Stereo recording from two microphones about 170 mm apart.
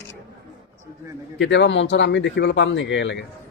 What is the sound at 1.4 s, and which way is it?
Speech, 90° left.